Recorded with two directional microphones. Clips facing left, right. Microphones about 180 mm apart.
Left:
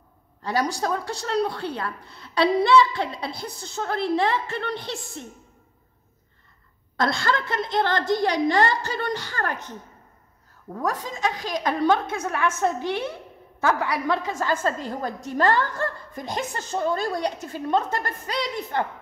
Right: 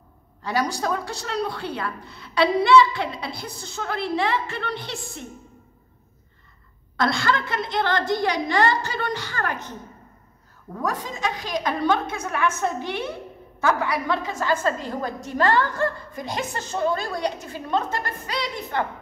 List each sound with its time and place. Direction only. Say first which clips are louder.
0.4 s speech: even; 35° left (ahead or behind)
7.0 s a woman's voice: right 1 dB; 40° left (ahead or behind)
10.8 s a woman's voice: left 1 dB; 40° left (ahead or behind)